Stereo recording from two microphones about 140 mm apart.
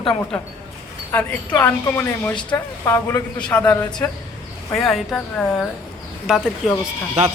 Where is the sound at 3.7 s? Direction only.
30° left (ahead or behind).